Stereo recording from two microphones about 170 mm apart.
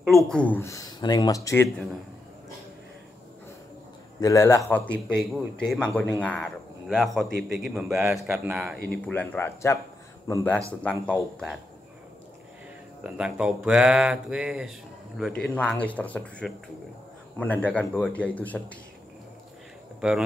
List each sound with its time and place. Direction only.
0.0 s speech: centre (ahead or behind); by 1.7 s 20° left (ahead or behind)
4.2 s a man's voice: 15° left (ahead or behind); by 8.7 s 5° right (ahead or behind)
8.9 s a man's voice: 5° left (ahead or behind)
13.0 s a man's voice: 5° right (ahead or behind)
20.0 s speech: 5° right (ahead or behind)